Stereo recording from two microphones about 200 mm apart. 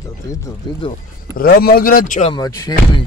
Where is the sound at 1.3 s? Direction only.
45° left (ahead or behind).